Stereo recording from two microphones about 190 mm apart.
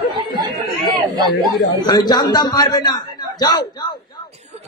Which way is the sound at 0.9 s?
25° right (ahead or behind).